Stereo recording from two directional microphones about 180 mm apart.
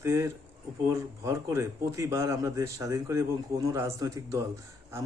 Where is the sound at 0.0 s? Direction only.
15° right (ahead or behind).